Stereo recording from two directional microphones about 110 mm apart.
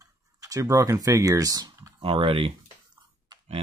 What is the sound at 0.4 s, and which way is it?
Speech, 30° right (ahead or behind).